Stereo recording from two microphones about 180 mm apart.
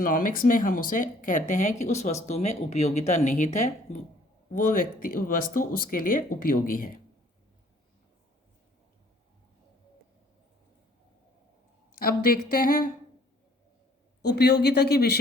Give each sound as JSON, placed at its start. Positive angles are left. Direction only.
{"t": 0.0, "sound": "speech", "side_deg": 50}
{"t": 11.9, "sound": "speech", "side_deg": 55}
{"t": 14.2, "sound": "speech", "side_deg": 65}